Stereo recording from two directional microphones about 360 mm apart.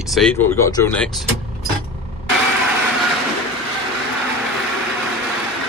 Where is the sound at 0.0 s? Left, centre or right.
Centre.